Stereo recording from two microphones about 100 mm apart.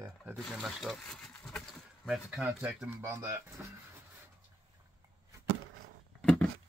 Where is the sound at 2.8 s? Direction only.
25° right (ahead or behind).